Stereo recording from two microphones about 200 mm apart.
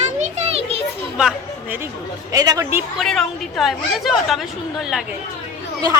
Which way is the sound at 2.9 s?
Centre (ahead or behind).